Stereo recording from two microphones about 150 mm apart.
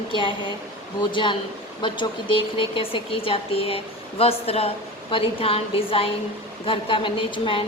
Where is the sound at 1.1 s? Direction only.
35° left (ahead or behind).